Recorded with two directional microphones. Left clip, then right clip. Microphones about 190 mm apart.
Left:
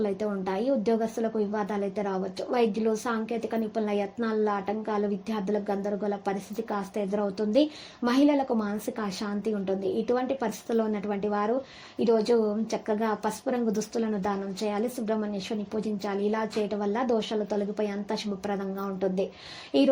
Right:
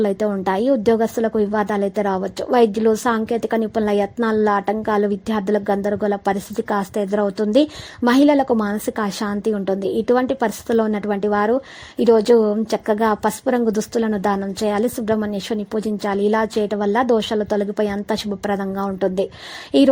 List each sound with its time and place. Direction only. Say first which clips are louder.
0.0 s a woman's voice: right 10 dB; 45° right (ahead or behind)